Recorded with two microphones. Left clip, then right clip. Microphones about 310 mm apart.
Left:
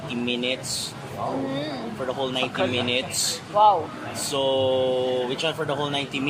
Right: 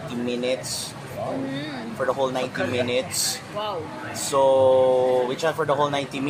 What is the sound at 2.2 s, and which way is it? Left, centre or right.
Speech, right.